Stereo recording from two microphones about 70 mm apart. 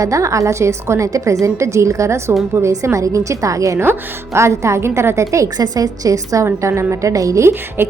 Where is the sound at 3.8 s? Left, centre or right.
Right.